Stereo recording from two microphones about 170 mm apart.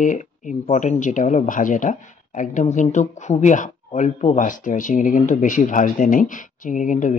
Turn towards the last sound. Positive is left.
turn(degrees=50)  # may be behind; listen again after turning